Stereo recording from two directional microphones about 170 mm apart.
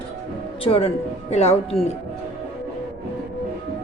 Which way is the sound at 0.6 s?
35° left (ahead or behind).